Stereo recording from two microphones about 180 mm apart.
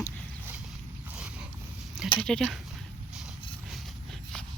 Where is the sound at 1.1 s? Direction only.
5° right (ahead or behind).